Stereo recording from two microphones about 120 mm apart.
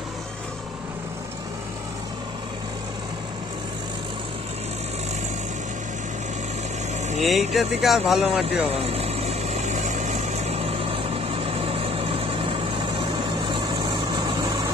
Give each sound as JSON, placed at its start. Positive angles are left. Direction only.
{"t": 7.2, "sound": "speech", "side_deg": 0}
{"t": 8.7, "sound": "vehicle", "side_deg": -55}